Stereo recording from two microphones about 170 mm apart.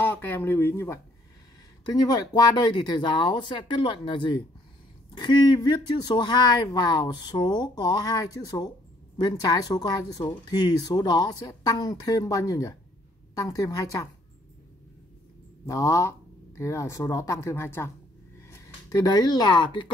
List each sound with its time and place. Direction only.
0.0 s speech: 10° left (ahead or behind)
2.0 s speech: 25° left (ahead or behind)
15.6 s speech: 20° left (ahead or behind)